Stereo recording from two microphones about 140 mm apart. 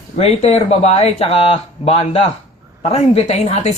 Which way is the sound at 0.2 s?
50° left (ahead or behind).